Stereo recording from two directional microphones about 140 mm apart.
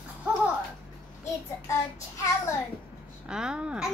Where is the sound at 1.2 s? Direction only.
20° left (ahead or behind).